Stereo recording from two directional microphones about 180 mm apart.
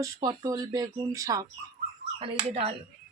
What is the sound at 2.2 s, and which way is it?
Speech, 35° right (ahead or behind).